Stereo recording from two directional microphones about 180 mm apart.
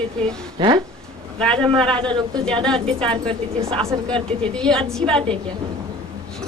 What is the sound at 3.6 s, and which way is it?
Speech, 35° right (ahead or behind).